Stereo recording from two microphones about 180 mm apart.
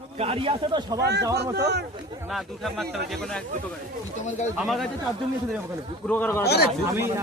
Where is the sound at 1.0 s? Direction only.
70° right (ahead or behind).